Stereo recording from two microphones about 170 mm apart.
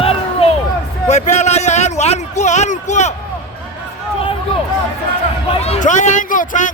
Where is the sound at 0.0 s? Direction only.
35° left (ahead or behind).